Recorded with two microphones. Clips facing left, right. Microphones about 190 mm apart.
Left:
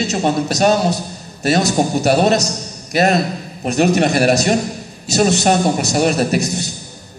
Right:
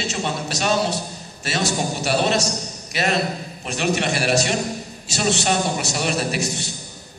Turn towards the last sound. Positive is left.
turn(degrees=40)  # may be behind; listen again after turning